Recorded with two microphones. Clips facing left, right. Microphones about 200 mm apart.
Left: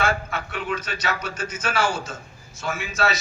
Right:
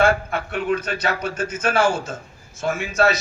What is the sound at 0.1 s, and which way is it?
A man's voice, 55° right (ahead or behind).